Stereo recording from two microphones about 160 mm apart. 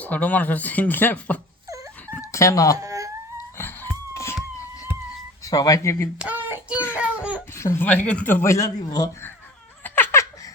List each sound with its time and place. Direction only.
0.0 s speech: 10° left (ahead or behind)
1.6 s wail: 20° right (ahead or behind)
2.0 s a sound: 20° left (ahead or behind)
2.7 s a sound: 20° right (ahead or behind)
3.3 s wheeze: 15° left (ahead or behind)
5.5 s speech: 20° left (ahead or behind)
6.1 s child singing: 10° right (ahead or behind)
6.9 s a sound: 10° right (ahead or behind)
7.5 s speech: 15° left (ahead or behind)
9.8 s laughter: 15° left (ahead or behind)